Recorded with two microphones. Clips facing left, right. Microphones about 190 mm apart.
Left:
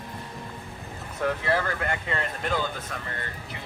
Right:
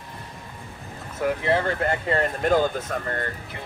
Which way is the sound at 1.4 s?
25° right (ahead or behind).